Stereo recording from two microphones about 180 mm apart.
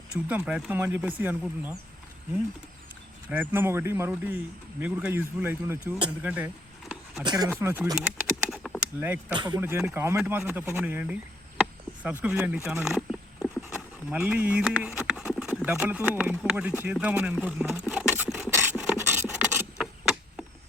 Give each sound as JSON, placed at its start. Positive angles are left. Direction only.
{"t": 0.3, "sound": "speech", "side_deg": -5}
{"t": 3.5, "sound": "speech", "side_deg": -15}
{"t": 7.3, "sound": "speech", "side_deg": -20}
{"t": 7.5, "sound": "a sound", "side_deg": -10}
{"t": 9.0, "sound": "speech", "side_deg": -10}
{"t": 9.3, "sound": "speech", "side_deg": -25}
{"t": 9.6, "sound": "speech", "side_deg": -10}
{"t": 12.2, "sound": "speech", "side_deg": -5}
{"t": 18.5, "sound": "a sound", "side_deg": -10}